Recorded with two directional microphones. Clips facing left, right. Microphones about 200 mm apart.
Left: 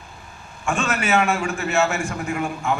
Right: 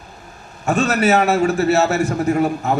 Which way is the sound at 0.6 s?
40° right (ahead or behind).